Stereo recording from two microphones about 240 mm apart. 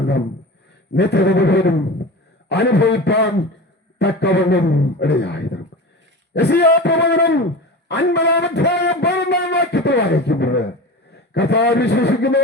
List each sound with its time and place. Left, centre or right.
0.9 s a man's voice: left